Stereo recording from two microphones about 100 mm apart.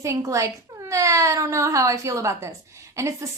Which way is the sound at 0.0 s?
30° right (ahead or behind).